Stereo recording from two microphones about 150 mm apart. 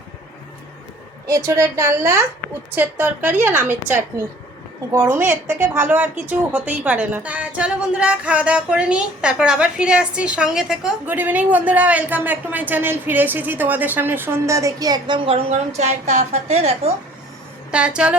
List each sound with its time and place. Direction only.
1.3 s a woman's voice: 20° right (ahead or behind); by 16.9 s 45° right (ahead or behind)
17.7 s a woman's voice: 5° right (ahead or behind)